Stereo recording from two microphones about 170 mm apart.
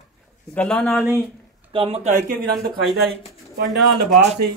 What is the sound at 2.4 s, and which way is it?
Speech, centre (ahead or behind).